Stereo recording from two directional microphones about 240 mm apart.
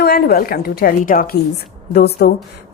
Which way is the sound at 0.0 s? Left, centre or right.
Left.